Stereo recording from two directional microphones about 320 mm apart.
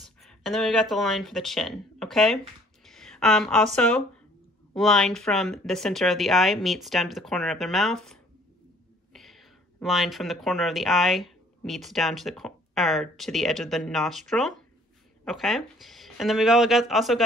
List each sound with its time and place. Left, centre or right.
0.2 s speech: centre